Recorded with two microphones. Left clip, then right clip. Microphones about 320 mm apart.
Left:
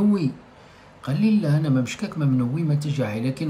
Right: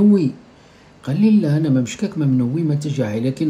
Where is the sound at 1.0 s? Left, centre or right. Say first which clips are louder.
Right 5 dB; centre.